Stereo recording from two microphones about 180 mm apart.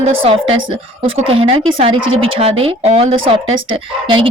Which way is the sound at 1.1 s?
30° right (ahead or behind).